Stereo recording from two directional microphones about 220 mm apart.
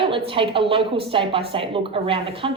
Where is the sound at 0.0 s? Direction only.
25° right (ahead or behind).